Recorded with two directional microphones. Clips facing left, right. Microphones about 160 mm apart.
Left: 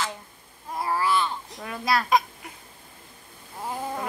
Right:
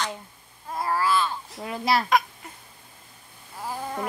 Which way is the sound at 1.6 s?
25° right (ahead or behind).